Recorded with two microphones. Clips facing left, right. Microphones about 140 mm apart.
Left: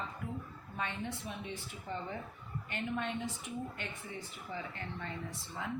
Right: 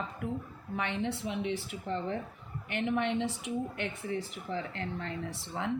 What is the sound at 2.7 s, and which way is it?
Speech, 70° right (ahead or behind).